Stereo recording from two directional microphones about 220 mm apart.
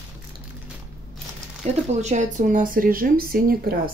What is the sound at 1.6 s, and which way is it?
Speech, 30° right (ahead or behind).